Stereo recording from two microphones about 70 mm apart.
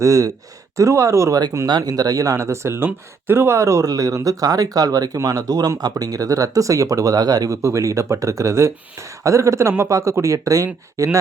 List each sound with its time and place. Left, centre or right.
0.0 s speech: right
1.6 s speech: right